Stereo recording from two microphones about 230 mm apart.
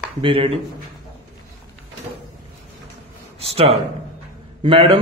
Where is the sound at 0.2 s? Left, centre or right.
Right.